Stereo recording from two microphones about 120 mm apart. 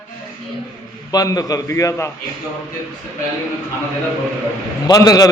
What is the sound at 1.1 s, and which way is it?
Speech, 30° left (ahead or behind).